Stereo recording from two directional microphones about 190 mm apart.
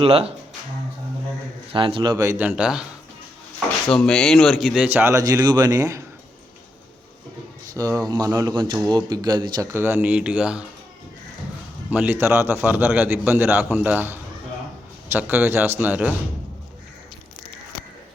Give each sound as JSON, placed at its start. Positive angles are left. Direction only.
{"t": 0.0, "sound": "speech", "side_deg": -30}
{"t": 1.7, "sound": "speech", "side_deg": -25}
{"t": 3.9, "sound": "speech", "side_deg": 0}
{"t": 7.8, "sound": "speech", "side_deg": -15}
{"t": 11.9, "sound": "speech", "side_deg": -10}